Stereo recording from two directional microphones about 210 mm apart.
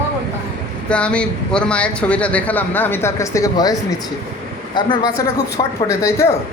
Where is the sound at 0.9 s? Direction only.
5° left (ahead or behind).